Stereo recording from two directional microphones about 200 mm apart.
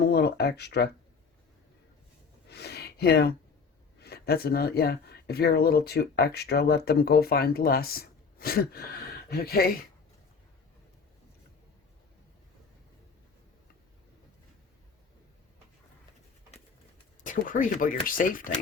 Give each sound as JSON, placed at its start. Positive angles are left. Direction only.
{"t": 0.0, "sound": "speech", "side_deg": 55}
{"t": 2.5, "sound": "a sound", "side_deg": 55}
{"t": 4.0, "sound": "speech", "side_deg": 50}
{"t": 17.2, "sound": "speech", "side_deg": 40}